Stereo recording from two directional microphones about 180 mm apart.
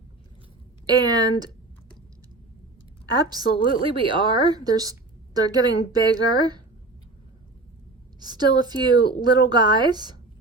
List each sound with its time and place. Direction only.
0.9 s a woman's voice: 20° right (ahead or behind)
3.1 s a woman's voice: 20° right (ahead or behind)
8.2 s a woman's voice: 25° right (ahead or behind)